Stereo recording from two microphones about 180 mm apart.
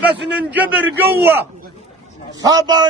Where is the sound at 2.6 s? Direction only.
25° right (ahead or behind).